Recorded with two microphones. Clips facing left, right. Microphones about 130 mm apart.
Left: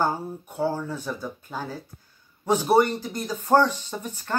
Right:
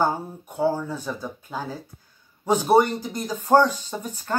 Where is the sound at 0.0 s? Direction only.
15° right (ahead or behind).